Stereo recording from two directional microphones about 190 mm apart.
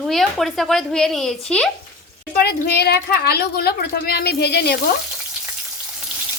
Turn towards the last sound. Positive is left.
turn(degrees=60)  # may be behind; listen again after turning